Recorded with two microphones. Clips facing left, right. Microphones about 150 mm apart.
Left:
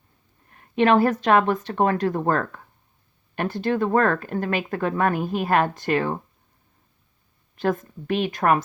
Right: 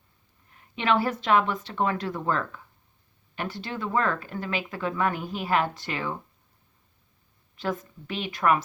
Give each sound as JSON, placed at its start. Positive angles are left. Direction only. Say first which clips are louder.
{"t": 0.5, "sound": "speech", "louder": "left 7 dB", "side_deg": 50}
{"t": 7.5, "sound": "speech", "louder": "left 6 dB", "side_deg": 50}